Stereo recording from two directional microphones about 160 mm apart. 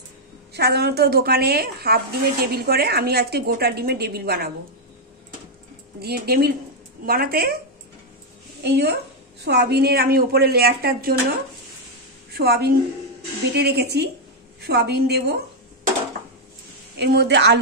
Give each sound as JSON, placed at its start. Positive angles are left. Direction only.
{"t": 0.5, "sound": "a woman's voice", "side_deg": -90}
{"t": 5.9, "sound": "speech", "side_deg": -75}
{"t": 8.6, "sound": "a woman's voice", "side_deg": -90}
{"t": 13.5, "sound": "a woman's voice", "side_deg": -90}
{"t": 17.0, "sound": "a woman's voice", "side_deg": -90}